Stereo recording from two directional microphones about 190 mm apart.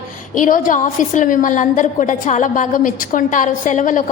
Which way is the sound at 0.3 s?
45° left (ahead or behind).